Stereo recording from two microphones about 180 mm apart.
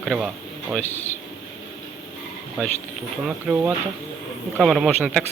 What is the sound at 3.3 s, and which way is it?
Speech, 5° right (ahead or behind).